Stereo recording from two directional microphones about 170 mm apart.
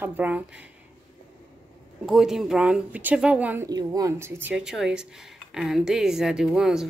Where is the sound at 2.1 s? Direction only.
Centre (ahead or behind).